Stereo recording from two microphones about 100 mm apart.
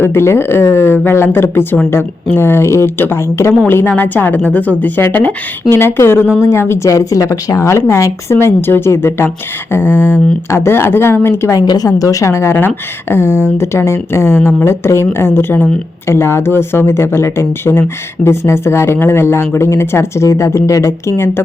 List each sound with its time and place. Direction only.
0.0 s speech: 25° left (ahead or behind)
11.5 s speech: 40° left (ahead or behind)